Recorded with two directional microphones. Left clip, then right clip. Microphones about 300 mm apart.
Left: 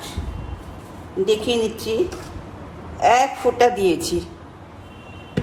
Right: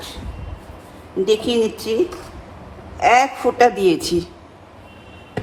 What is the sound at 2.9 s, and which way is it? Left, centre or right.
A man's voice, centre.